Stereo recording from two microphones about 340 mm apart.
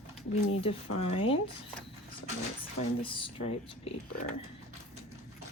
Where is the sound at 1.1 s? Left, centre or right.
Centre.